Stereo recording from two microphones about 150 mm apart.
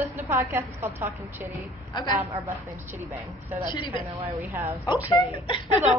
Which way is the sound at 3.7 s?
35° left (ahead or behind).